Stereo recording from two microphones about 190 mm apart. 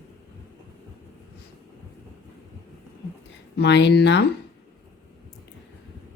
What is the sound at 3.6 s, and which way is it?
Speech, 65° left (ahead or behind).